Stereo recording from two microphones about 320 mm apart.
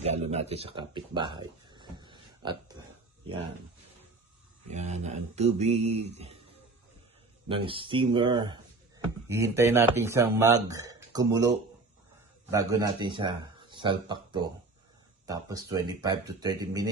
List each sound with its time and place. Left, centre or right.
0.0 s speech: centre
4.6 s speech: right
7.4 s speech: centre